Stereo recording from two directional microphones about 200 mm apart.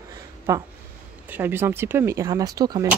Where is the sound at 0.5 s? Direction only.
15° right (ahead or behind).